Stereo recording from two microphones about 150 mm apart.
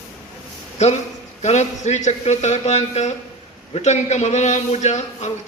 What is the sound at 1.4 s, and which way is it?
A man's voice, 50° left (ahead or behind).